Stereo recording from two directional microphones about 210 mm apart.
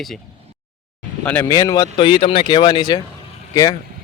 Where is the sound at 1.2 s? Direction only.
15° left (ahead or behind).